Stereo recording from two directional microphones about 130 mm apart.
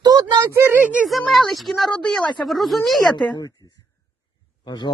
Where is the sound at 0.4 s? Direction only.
15° right (ahead or behind).